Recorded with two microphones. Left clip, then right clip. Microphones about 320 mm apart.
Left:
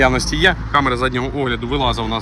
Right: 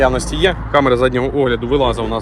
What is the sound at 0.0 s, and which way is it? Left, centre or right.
Speech, centre.